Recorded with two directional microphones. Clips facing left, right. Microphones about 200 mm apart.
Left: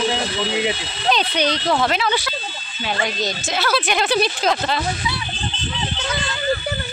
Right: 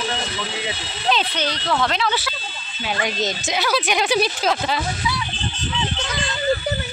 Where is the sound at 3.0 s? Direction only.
20° right (ahead or behind).